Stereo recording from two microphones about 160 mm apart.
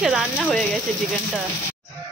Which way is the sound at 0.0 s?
5° right (ahead or behind).